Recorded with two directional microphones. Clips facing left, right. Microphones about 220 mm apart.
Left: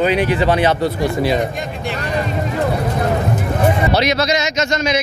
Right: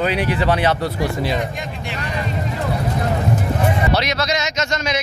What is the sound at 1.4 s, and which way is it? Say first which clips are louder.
Speech: left 4 dB; 40° left (ahead or behind).